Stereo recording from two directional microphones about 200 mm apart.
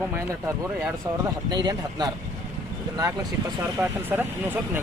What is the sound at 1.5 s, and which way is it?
Speech, 20° right (ahead or behind).